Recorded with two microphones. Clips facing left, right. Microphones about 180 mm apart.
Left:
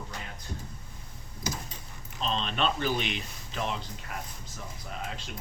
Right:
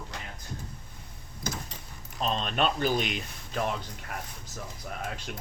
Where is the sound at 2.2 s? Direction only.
45° right (ahead or behind).